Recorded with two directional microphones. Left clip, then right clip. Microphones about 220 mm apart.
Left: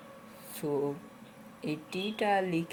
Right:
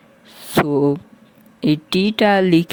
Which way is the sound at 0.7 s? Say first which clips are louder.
Right 15 dB; 40° right (ahead or behind).